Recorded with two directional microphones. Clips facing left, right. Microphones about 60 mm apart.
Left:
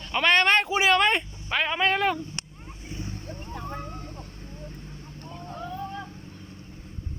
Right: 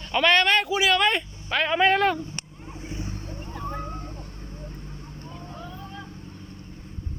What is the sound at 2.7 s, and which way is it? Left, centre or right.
Vehicle, right.